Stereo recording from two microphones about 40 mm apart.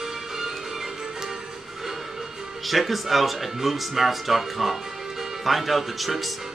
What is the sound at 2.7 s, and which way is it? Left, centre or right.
Speech, centre.